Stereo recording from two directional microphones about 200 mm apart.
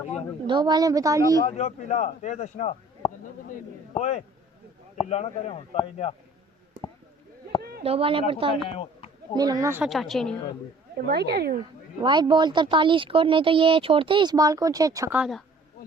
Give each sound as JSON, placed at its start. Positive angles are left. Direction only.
{"t": 0.4, "sound": "speech", "side_deg": -20}
{"t": 1.5, "sound": "a man's voice", "side_deg": 35}
{"t": 7.6, "sound": "a sound", "side_deg": -50}
{"t": 7.9, "sound": "speech", "side_deg": -30}
{"t": 8.6, "sound": "speech", "side_deg": 30}
{"t": 9.3, "sound": "speech", "side_deg": -20}
{"t": 9.9, "sound": "a woman's voice", "side_deg": 0}
{"t": 10.9, "sound": "speech", "side_deg": -50}
{"t": 11.9, "sound": "speech", "side_deg": -25}
{"t": 15.2, "sound": "a woman's voice", "side_deg": 0}